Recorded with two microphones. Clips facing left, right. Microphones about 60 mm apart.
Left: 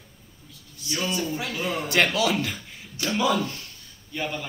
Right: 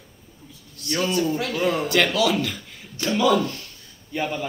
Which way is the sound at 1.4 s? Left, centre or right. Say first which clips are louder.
Right 6 dB; centre.